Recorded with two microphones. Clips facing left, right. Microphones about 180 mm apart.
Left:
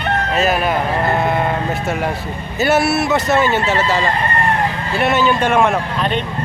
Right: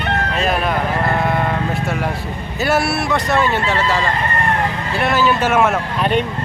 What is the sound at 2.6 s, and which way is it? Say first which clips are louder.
Speech: left 3 dB; centre (ahead or behind).